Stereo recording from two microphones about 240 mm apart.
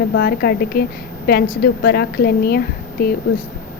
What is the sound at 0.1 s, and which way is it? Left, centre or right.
A woman's voice, left.